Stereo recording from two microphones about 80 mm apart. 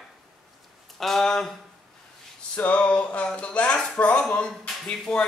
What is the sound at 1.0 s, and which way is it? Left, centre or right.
Speech, centre.